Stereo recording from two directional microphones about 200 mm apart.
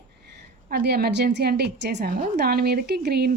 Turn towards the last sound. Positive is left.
turn(degrees=-55)  # may be behind; listen again after turning